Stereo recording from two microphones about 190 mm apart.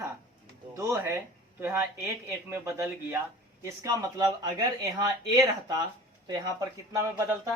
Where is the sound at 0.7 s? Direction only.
15° right (ahead or behind).